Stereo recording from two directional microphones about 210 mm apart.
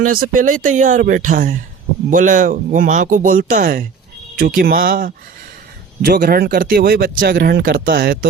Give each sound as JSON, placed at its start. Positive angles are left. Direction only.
{"t": 0.0, "sound": "speech", "side_deg": -40}